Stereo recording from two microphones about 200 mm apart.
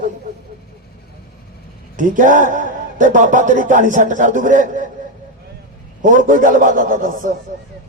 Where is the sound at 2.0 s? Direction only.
40° right (ahead or behind).